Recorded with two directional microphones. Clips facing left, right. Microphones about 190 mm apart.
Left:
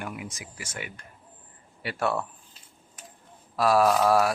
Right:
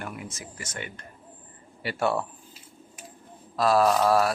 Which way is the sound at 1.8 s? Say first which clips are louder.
Right 2 dB; centre (ahead or behind).